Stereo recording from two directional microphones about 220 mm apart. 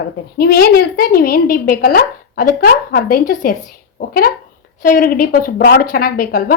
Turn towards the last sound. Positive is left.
turn(degrees=40)  # may be behind; listen again after turning